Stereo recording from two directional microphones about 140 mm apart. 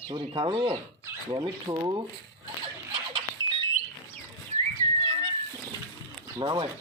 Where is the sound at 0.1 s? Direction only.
35° right (ahead or behind).